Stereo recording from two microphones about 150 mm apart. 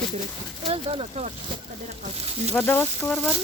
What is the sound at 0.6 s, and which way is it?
Speech, 40° right (ahead or behind).